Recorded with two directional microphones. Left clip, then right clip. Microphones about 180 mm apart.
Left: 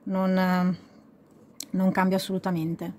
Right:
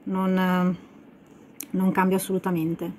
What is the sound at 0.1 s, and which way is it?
Speech, 55° left (ahead or behind).